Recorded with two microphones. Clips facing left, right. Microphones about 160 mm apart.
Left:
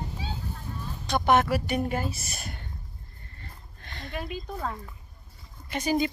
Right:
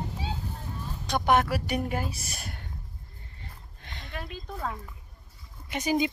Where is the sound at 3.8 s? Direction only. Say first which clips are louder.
Left 4 dB; 15° right (ahead or behind).